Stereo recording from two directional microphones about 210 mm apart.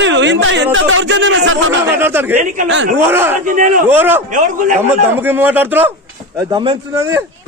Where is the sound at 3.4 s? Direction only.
40° right (ahead or behind).